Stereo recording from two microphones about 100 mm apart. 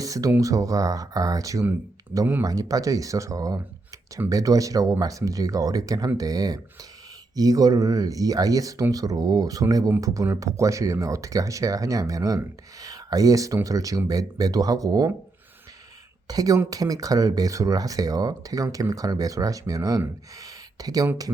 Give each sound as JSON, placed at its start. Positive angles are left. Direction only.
{"t": 0.0, "sound": "speech", "side_deg": -35}
{"t": 16.2, "sound": "speech", "side_deg": -40}
{"t": 20.4, "sound": "a sound", "side_deg": -40}